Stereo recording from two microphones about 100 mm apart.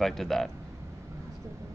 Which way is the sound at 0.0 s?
5° left (ahead or behind).